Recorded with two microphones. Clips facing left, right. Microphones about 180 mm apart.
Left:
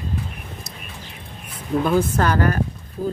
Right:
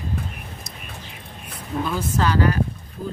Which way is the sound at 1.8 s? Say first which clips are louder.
Left 4 dB; 55° left (ahead or behind).